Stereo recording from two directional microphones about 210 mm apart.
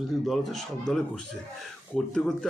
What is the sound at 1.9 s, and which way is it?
Speech, 5° left (ahead or behind).